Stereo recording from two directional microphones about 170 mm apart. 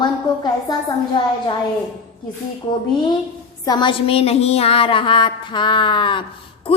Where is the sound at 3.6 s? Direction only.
25° left (ahead or behind).